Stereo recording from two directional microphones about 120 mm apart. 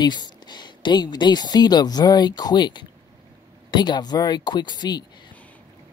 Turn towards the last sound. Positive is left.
turn(degrees=35)  # may be behind; listen again after turning